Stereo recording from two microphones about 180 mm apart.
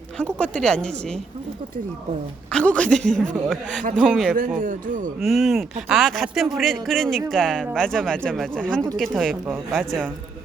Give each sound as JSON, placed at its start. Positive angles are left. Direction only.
{"t": 0.2, "sound": "speech", "side_deg": 5}
{"t": 2.5, "sound": "speech", "side_deg": 5}
{"t": 4.4, "sound": "a man's voice", "side_deg": -45}
{"t": 5.2, "sound": "speech", "side_deg": 0}